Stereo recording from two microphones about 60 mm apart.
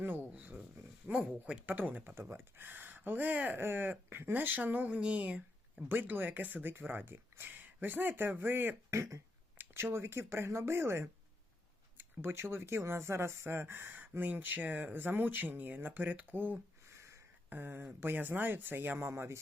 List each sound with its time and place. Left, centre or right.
0.3 s speech: right
1.6 s speech: right
2.3 s speech: right
3.6 s speech: right
5.9 s speech: right
17.0 s a sound: right
17.5 s speech: right